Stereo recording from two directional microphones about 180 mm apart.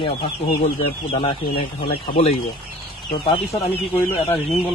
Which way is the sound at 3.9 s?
10° left (ahead or behind).